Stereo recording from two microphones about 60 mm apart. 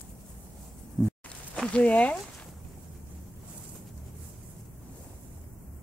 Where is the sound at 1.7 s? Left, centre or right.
Left.